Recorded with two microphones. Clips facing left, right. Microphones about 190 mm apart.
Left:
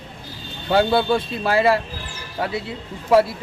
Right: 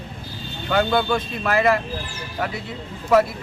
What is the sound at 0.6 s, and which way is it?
Speech, 30° left (ahead or behind).